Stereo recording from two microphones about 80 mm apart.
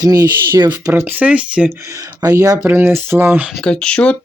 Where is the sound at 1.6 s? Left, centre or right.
Right.